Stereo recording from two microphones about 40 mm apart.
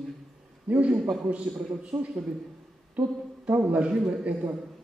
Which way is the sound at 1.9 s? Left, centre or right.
Right.